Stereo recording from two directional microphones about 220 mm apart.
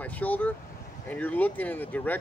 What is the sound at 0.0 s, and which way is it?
Speech, 5° left (ahead or behind).